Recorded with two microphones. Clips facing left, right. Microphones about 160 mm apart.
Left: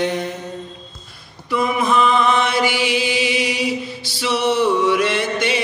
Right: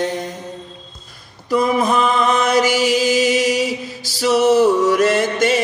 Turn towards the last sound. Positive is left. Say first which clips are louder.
# right 4 dB
turn(degrees=-45)  # may be behind; listen again after turning